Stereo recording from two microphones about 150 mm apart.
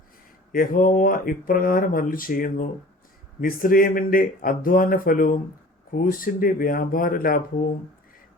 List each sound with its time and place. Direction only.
0.5 s speech: 65° left (ahead or behind)